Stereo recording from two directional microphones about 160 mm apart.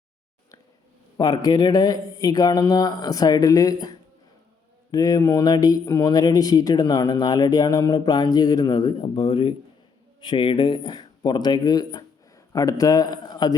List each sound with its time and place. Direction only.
1.1 s speech: 25° left (ahead or behind)